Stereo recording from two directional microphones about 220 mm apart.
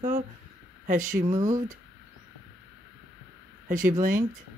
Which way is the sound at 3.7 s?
35° right (ahead or behind).